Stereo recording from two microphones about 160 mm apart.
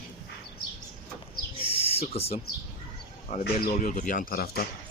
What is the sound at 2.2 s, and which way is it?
Speech, 40° left (ahead or behind).